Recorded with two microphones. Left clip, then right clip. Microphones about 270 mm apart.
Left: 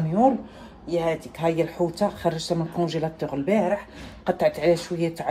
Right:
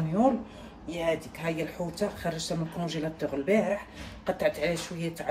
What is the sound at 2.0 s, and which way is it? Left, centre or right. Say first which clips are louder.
Speech: left 4 dB; left.